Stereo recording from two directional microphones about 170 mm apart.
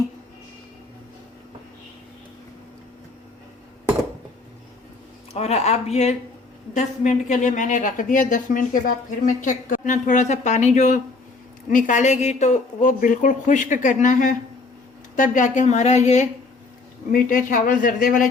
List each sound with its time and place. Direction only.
5.3 s a woman's voice: 40° left (ahead or behind)
17.1 s a woman's voice: 55° left (ahead or behind)